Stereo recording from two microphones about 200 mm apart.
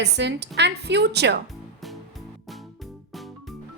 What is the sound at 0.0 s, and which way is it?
A woman's voice, 60° right (ahead or behind).